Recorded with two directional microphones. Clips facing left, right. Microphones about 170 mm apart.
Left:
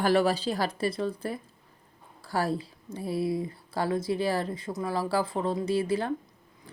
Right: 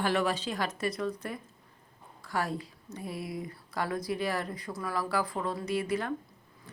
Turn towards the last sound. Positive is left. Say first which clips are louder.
# left 1 dB
turn(degrees=30)  # may be behind; listen again after turning